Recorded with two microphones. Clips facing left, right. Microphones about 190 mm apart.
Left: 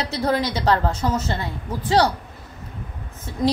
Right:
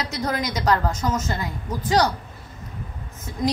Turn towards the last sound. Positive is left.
turn(degrees=30)  # may be behind; listen again after turning